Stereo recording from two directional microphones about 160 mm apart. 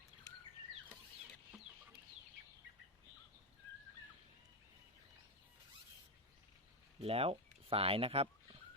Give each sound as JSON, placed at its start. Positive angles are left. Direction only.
{"t": 7.0, "sound": "speech", "side_deg": -40}